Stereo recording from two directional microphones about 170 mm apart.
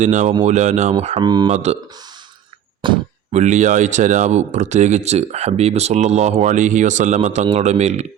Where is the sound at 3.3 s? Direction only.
45° right (ahead or behind).